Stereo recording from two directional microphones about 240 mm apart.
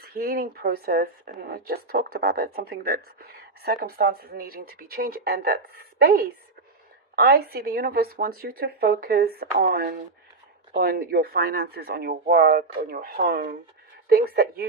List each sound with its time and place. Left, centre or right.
0.0 s speech: right